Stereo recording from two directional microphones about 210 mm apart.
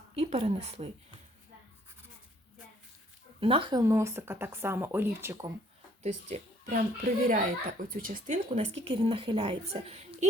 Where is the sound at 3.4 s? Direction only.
25° right (ahead or behind).